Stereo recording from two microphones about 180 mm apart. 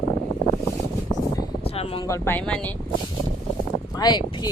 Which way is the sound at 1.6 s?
35° left (ahead or behind).